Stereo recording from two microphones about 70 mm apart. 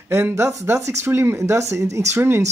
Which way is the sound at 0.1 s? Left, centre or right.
Right.